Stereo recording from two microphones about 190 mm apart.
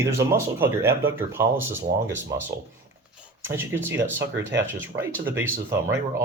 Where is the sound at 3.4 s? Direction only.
10° right (ahead or behind).